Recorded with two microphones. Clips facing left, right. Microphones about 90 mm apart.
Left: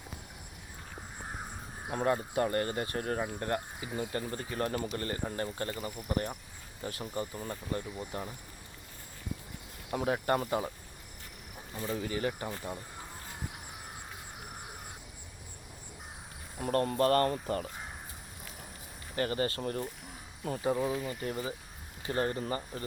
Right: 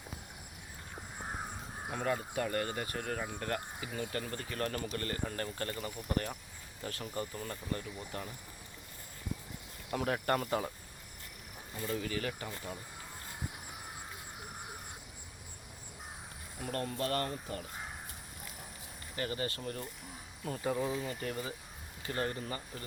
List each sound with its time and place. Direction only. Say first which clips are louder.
1.9 s speech: left 5 dB; 35° left (ahead or behind)
9.9 s speech: left 3 dB; 10° left (ahead or behind)
11.9 s speech: left 3 dB; 20° left (ahead or behind)
16.6 s speech: left 8 dB; 45° left (ahead or behind)
19.1 s speech: left 6 dB; 45° left (ahead or behind)
20.7 s speech: left 3 dB; 10° left (ahead or behind)
22.0 s speech: left 5 dB; 30° left (ahead or behind)